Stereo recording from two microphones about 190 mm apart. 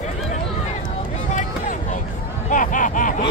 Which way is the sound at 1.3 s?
40° left (ahead or behind).